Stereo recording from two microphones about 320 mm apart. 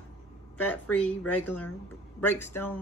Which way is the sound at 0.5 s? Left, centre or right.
Centre.